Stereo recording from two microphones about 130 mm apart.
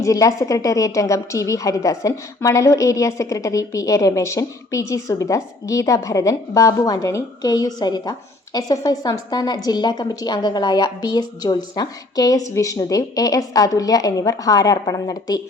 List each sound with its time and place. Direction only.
0.0 s a woman's voice: 25° left (ahead or behind)